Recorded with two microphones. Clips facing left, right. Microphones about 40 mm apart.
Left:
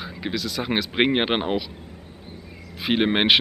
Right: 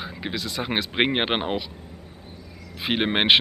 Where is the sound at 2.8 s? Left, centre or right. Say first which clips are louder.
Left 1 dB; centre.